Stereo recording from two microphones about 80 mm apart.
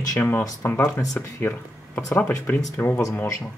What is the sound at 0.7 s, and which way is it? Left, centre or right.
Speech, left.